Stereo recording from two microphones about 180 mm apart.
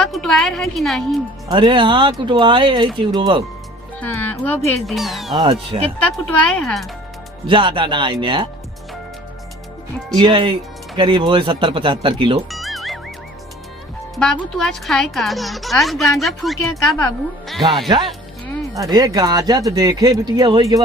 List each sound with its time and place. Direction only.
0.0 s a woman's voice: centre (ahead or behind)
1.5 s speech: 25° right (ahead or behind)
4.0 s speech: 10° left (ahead or behind)
4.9 s speech: centre (ahead or behind)
5.4 s speech: 30° right (ahead or behind)
6.3 s speech: 5° left (ahead or behind)
7.4 s speech: 25° right (ahead or behind)
10.2 s speech: 25° right (ahead or behind)
12.5 s music: centre (ahead or behind)
14.6 s speech: centre (ahead or behind)
17.8 s speech: 25° right (ahead or behind)